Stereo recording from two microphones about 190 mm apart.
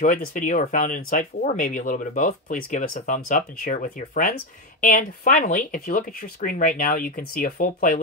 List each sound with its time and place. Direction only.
0.0 s speech: 45° left (ahead or behind)